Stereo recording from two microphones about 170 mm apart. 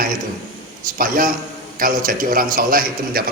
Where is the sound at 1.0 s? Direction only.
55° right (ahead or behind).